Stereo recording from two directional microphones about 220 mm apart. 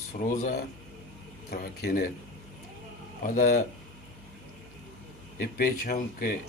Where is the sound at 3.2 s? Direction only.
35° left (ahead or behind).